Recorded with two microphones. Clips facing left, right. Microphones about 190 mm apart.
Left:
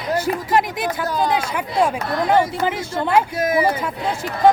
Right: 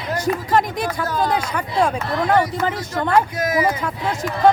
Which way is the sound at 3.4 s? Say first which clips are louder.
Left 1 dB; 30° left (ahead or behind).